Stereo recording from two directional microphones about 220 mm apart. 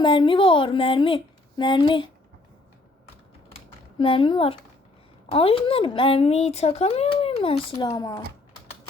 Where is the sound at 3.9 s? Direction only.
25° left (ahead or behind).